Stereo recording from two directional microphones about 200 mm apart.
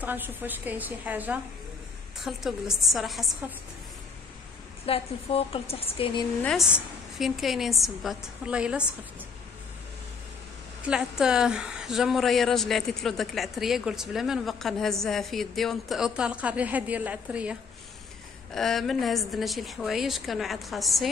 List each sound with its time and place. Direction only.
0.0 s a woman's voice: 10° right (ahead or behind)
4.8 s a woman's voice: 30° left (ahead or behind)
6.4 s a woman's voice: centre (ahead or behind)
10.9 s a woman's voice: 5° right (ahead or behind)